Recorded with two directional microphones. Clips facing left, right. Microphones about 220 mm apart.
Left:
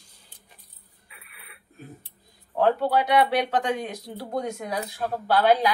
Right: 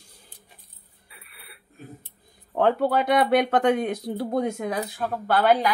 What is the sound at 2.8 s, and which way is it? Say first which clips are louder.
Speech: right 1 dB; 55° right (ahead or behind).